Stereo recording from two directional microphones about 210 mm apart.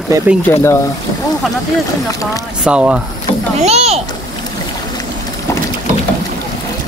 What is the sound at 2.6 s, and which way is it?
Speech, 5° right (ahead or behind).